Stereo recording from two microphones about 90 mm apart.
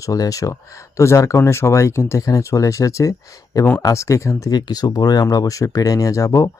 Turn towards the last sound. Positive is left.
turn(degrees=35)  # may be behind; listen again after turning